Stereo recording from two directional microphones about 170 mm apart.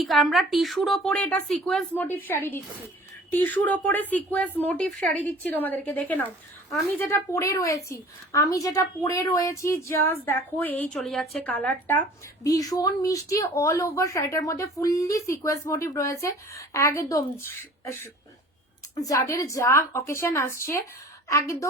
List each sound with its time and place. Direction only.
0.0 s a woman's voice: centre (ahead or behind); by 17.4 s 15° left (ahead or behind)
18.9 s a woman's voice: 20° left (ahead or behind)